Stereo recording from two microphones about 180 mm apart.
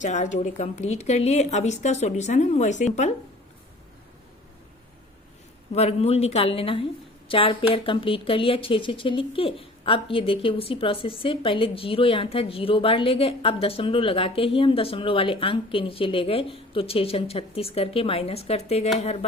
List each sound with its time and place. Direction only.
0.0 s speech: 45° left (ahead or behind)
5.7 s speech: 35° left (ahead or behind)